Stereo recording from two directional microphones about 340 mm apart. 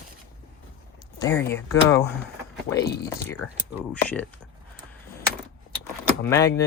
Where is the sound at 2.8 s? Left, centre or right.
Left.